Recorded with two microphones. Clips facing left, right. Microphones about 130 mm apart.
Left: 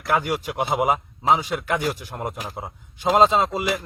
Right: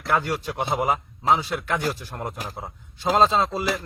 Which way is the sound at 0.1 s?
10° left (ahead or behind).